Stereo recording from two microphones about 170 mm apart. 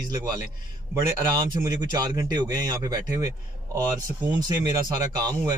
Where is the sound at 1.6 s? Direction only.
25° right (ahead or behind).